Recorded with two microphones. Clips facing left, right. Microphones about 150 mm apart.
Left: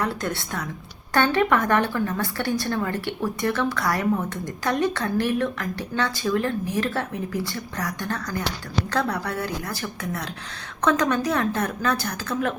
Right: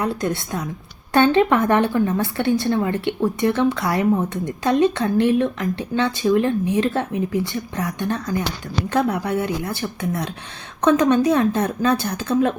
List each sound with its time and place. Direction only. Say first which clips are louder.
0.0 s speech: right 4 dB; 20° right (ahead or behind)